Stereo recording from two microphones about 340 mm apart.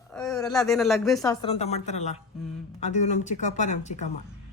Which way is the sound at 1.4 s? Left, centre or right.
Centre.